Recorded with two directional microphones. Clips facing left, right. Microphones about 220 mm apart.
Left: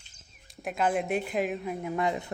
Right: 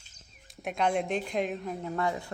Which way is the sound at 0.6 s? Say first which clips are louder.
Left 1 dB; 5° left (ahead or behind).